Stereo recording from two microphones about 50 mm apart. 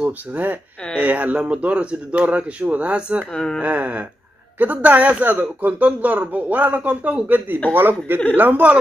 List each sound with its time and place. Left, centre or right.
0.3 s speech: right
7.2 s speech: right